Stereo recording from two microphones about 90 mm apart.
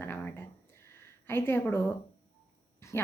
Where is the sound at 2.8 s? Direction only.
35° left (ahead or behind).